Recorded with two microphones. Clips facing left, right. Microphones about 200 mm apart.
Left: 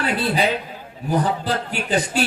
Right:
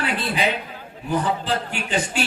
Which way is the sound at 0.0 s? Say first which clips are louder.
Left 3 dB; 40° left (ahead or behind).